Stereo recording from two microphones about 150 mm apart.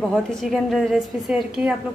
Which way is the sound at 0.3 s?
Centre (ahead or behind).